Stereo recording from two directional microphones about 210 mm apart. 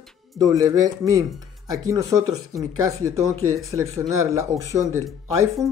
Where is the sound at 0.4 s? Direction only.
15° right (ahead or behind).